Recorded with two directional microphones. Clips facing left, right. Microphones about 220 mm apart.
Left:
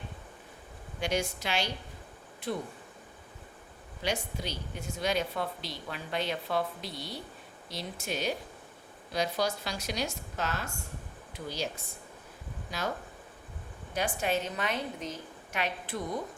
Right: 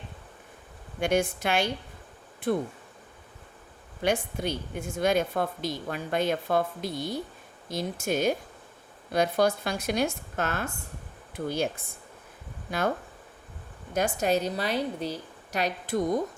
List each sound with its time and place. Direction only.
0.9 s speech: 55° right (ahead or behind)
4.0 s speech: 55° right (ahead or behind)
13.9 s a woman's voice: 45° right (ahead or behind)